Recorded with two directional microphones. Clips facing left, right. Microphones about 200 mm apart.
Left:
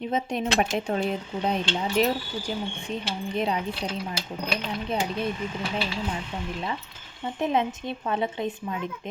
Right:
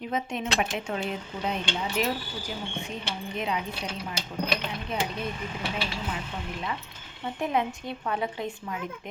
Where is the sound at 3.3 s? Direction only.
35° left (ahead or behind).